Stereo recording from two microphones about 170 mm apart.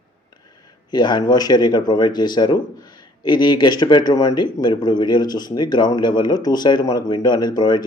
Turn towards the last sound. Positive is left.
turn(degrees=25)  # may be behind; listen again after turning